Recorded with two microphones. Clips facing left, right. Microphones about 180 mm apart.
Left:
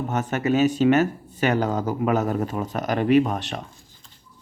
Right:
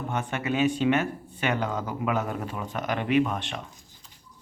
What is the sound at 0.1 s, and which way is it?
Speech, 40° left (ahead or behind).